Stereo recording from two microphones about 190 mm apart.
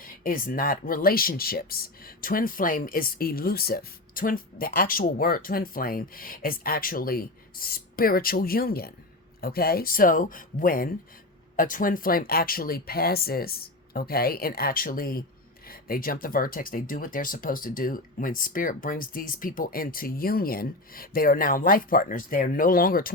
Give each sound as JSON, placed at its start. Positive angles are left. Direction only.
{"t": 0.0, "sound": "speech", "side_deg": 45}